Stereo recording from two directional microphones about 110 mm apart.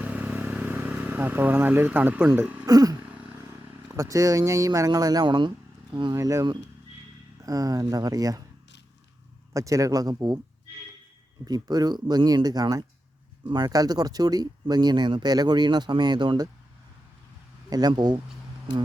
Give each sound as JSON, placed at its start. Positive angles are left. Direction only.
{"t": 0.0, "sound": "vehicle", "side_deg": -15}
{"t": 2.6, "sound": "throat clearing", "side_deg": -35}
{"t": 3.0, "sound": "a sound", "side_deg": -10}
{"t": 3.8, "sound": "speech", "side_deg": -30}
{"t": 6.1, "sound": "speech", "side_deg": -35}
{"t": 9.5, "sound": "speech", "side_deg": -30}
{"t": 11.4, "sound": "speech", "side_deg": -35}
{"t": 17.7, "sound": "speech", "side_deg": -35}